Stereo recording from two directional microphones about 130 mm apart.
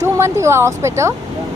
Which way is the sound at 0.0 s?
20° right (ahead or behind).